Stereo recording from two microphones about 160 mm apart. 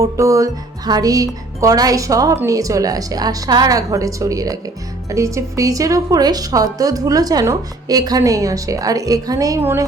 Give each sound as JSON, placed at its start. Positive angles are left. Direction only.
{"t": 0.0, "sound": "a woman's voice", "side_deg": -20}